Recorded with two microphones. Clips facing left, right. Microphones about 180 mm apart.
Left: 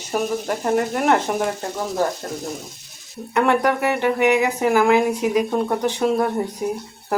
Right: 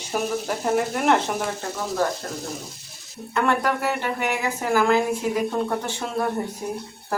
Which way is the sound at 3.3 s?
15° left (ahead or behind).